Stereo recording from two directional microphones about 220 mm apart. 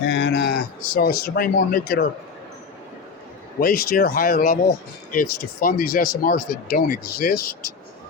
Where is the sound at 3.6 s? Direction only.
40° left (ahead or behind).